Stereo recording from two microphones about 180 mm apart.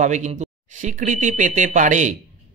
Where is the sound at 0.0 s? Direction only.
40° right (ahead or behind).